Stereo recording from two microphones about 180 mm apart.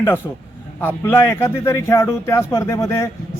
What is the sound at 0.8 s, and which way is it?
Speech, 10° left (ahead or behind).